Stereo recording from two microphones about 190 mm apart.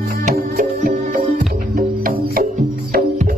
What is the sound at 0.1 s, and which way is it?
Music, 45° right (ahead or behind).